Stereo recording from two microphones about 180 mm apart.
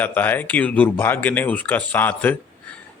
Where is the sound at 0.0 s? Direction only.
10° left (ahead or behind).